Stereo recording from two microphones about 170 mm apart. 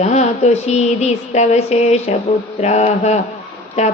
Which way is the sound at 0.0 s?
40° left (ahead or behind).